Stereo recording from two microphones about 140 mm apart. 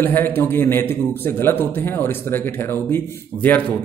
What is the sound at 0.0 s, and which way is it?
Speech, 15° left (ahead or behind).